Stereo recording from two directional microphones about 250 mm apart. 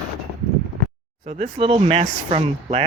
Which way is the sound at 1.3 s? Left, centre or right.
Right.